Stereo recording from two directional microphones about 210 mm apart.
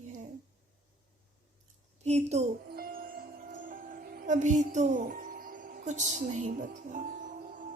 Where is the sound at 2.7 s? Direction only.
45° right (ahead or behind).